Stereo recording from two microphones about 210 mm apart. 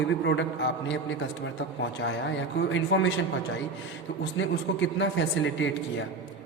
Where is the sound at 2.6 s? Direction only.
65° left (ahead or behind).